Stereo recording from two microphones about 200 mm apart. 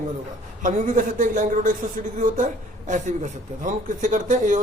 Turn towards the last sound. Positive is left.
turn(degrees=-40)  # may be behind; listen again after turning